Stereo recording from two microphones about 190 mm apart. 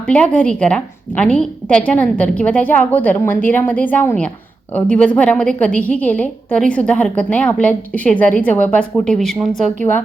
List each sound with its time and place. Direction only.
0.1 s a woman's voice: 5° left (ahead or behind)
9.5 s a woman's voice: 35° right (ahead or behind)